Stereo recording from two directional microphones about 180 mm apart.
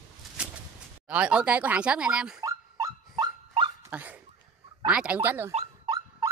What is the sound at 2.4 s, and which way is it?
Dog, 20° right (ahead or behind).